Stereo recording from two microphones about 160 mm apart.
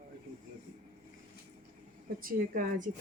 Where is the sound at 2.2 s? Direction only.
60° right (ahead or behind).